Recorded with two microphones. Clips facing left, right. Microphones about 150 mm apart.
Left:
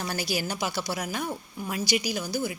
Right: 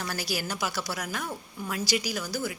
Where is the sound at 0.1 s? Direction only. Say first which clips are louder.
Left 2 dB; 20° left (ahead or behind).